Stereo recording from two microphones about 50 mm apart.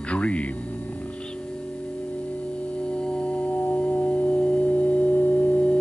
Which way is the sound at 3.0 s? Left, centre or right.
Left.